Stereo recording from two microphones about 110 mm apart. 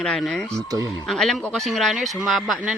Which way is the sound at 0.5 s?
30° right (ahead or behind).